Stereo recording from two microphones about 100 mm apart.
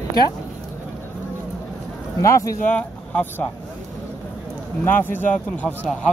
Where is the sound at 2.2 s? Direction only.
35° left (ahead or behind).